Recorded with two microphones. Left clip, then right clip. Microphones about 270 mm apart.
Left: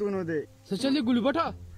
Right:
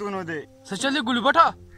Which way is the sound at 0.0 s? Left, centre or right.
Right.